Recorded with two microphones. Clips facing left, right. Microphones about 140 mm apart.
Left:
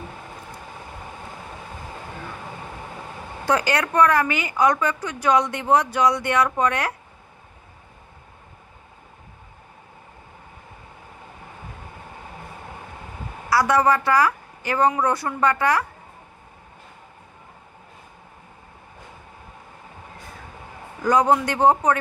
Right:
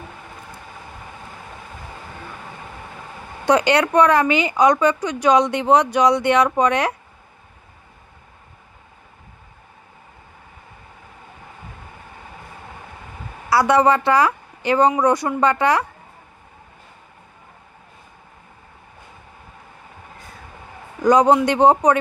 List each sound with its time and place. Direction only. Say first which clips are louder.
3.4 s a woman's voice: right 6 dB; 20° right (ahead or behind)
13.5 s a woman's voice: right 3 dB; 25° right (ahead or behind)
21.0 s a woman's voice: right 5 dB; 20° right (ahead or behind)